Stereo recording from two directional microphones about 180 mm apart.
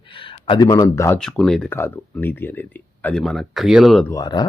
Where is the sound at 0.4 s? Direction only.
25° left (ahead or behind).